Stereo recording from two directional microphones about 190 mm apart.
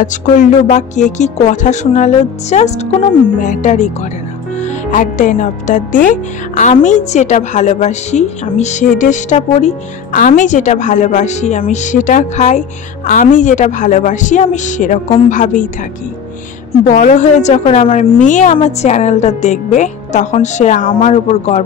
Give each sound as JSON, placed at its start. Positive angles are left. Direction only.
{"t": 0.0, "sound": "speech", "side_deg": 40}
{"t": 15.0, "sound": "a woman's voice", "side_deg": 30}
{"t": 15.3, "sound": "a woman's voice", "side_deg": 40}
{"t": 16.9, "sound": "speech", "side_deg": 40}